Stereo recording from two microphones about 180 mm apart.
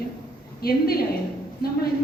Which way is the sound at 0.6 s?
60° left (ahead or behind).